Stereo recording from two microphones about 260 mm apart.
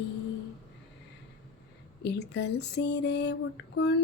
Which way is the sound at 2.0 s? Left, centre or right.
Left.